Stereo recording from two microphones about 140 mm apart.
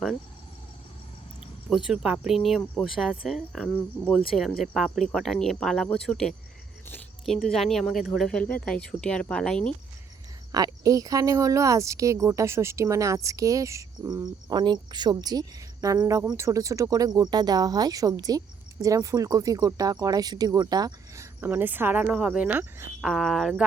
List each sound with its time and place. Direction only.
1.7 s speech: 5° right (ahead or behind)
7.4 s speech: centre (ahead or behind)
10.5 s speech: 25° right (ahead or behind)
21.4 s speech: 15° right (ahead or behind)
23.0 s speech: centre (ahead or behind)